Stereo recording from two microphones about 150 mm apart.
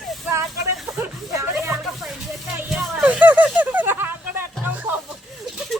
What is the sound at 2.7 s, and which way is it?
Music, centre (ahead or behind).